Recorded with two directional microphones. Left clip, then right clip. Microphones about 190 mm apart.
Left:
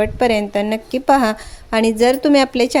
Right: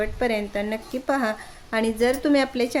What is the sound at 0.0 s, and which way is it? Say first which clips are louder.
A woman's voice: left 8 dB; 40° left (ahead or behind).